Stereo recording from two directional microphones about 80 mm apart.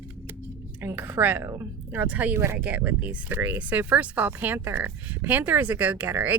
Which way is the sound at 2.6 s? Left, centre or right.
Centre.